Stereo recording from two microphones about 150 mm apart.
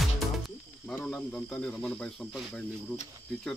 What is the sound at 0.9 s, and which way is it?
Cricket, 5° left (ahead or behind).